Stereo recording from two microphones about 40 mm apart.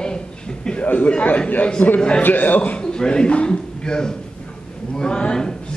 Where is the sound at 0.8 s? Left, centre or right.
Left.